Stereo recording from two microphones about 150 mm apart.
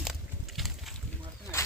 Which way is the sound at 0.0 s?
Centre (ahead or behind).